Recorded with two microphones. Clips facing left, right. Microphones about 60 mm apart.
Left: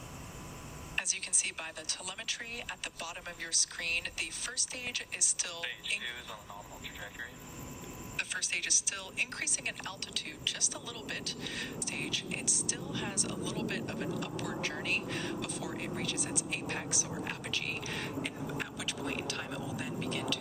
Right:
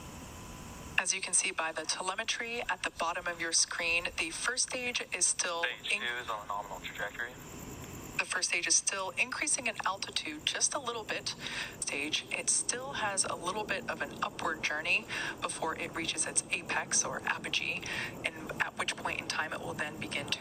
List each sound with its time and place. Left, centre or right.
0.9 s speech: right
6.0 s speech: right
8.1 s speech: right